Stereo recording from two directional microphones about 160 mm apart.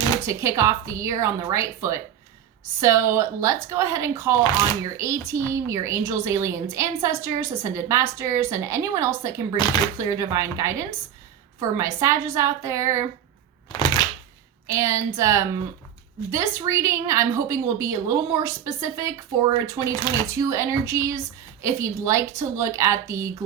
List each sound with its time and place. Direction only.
0.3 s a woman's voice: 20° right (ahead or behind)
14.7 s a woman's voice: 20° right (ahead or behind)